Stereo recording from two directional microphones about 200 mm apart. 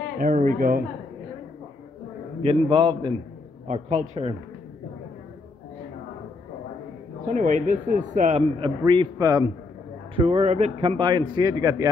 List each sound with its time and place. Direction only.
0.2 s speech: 40° right (ahead or behind)
2.4 s a man's voice: 25° right (ahead or behind)
7.2 s a man's voice: 40° right (ahead or behind); by 11.9 s 15° right (ahead or behind)